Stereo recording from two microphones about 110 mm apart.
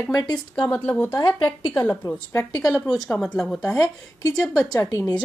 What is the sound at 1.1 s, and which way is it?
Speech, 40° left (ahead or behind).